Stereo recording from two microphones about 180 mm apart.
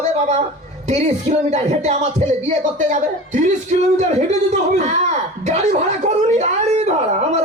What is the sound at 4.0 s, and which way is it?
A man's voice, 40° right (ahead or behind).